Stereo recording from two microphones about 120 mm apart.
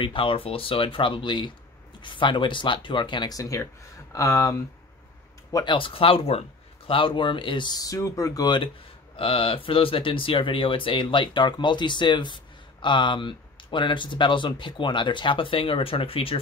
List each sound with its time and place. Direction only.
0.0 s speech: 45° left (ahead or behind)
5.8 s speech: 50° left (ahead or behind)
9.1 s speech: 50° left (ahead or behind)